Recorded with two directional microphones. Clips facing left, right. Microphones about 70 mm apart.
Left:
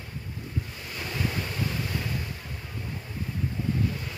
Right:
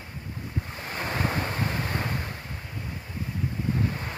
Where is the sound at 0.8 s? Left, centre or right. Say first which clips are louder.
Right 5 dB; right.